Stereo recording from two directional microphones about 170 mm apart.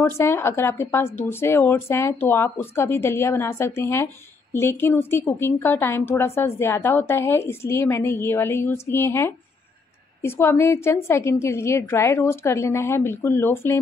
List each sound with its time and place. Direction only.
0.2 s a woman's voice: 15° left (ahead or behind)